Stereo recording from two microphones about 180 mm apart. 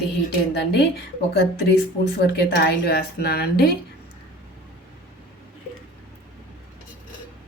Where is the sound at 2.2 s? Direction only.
65° left (ahead or behind).